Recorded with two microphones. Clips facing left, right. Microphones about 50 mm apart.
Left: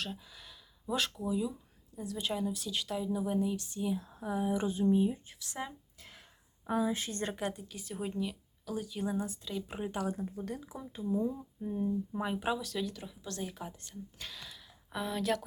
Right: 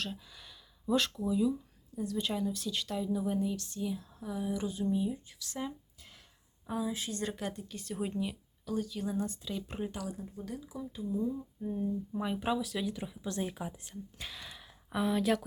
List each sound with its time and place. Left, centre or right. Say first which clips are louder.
0.0 s speech: right 1 dB; centre; by 5.5 s left
6.0 s a sound: left 3 dB; left
6.7 s a woman's voice: left 3 dB; left
7.4 s speech: left 1 dB; centre
8.7 s speech: right 1 dB; centre
9.2 s speech: right 1 dB; centre
10.1 s a woman's voice: left 5 dB; left
10.7 s speech: left 1 dB; left
11.6 s speech: left 2 dB; centre
12.6 s speech: right 1 dB; centre
13.6 s speech: right 2 dB; centre
14.4 s gasp: right 2 dB; right
14.8 s speech: right 4 dB; centre